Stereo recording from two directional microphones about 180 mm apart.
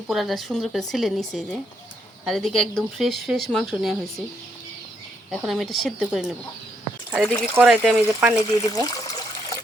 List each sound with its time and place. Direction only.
0.1 s speech: centre (ahead or behind)
5.3 s speech: centre (ahead or behind)
7.3 s speech: 10° left (ahead or behind)
7.5 s speech: 5° right (ahead or behind)
8.4 s water: 20° left (ahead or behind)